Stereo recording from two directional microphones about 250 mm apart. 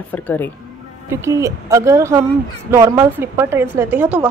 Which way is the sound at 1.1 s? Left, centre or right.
Centre.